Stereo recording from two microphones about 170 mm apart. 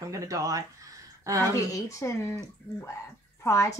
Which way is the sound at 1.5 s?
20° left (ahead or behind).